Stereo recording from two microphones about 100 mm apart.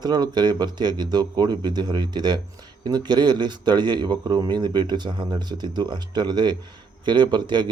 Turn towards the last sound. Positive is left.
turn(degrees=-50)  # may be behind; listen again after turning